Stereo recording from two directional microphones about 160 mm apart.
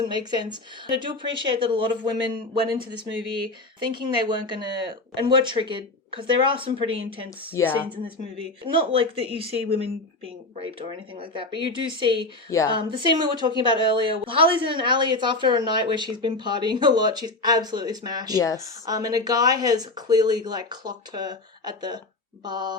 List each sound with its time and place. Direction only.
0.1 s a woman's voice: 25° right (ahead or behind)
7.5 s a woman's voice: 15° left (ahead or behind)
8.6 s speech: 35° right (ahead or behind)
11.1 s speech: 30° right (ahead or behind)
12.5 s speech: 20° left (ahead or behind)
12.7 s a woman's voice: 30° right (ahead or behind)
18.3 s speech: 20° left (ahead or behind)
18.9 s a woman's voice: 25° right (ahead or behind)